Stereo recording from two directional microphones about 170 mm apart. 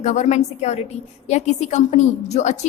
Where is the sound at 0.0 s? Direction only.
40° left (ahead or behind).